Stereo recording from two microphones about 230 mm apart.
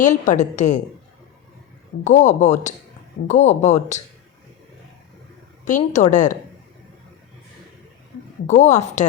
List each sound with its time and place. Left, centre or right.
0.0 s a woman's voice: left
2.0 s a woman's voice: left
5.6 s a woman's voice: left
8.4 s a woman's voice: left